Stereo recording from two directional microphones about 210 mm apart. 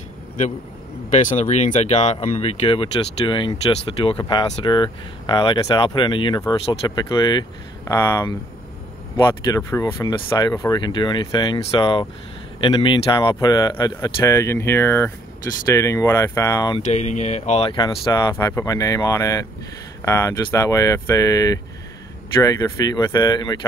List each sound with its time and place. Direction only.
1.3 s speech: 35° left (ahead or behind); by 16.8 s 15° left (ahead or behind)
16.9 s speech: 35° left (ahead or behind)